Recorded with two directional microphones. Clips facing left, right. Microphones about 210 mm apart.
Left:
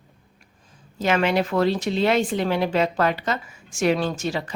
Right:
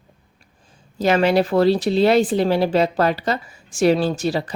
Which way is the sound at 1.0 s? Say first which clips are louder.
Right 4 dB; 35° right (ahead or behind).